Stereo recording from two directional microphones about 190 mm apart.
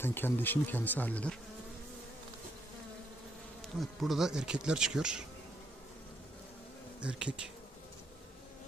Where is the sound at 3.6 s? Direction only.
Centre (ahead or behind).